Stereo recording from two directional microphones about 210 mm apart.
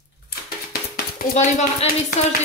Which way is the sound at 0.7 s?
40° left (ahead or behind).